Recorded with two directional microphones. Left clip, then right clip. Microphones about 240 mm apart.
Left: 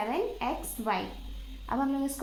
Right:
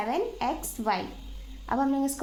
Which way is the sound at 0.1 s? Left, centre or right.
Right.